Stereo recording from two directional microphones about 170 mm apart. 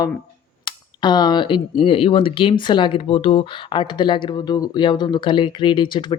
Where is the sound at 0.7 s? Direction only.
25° left (ahead or behind).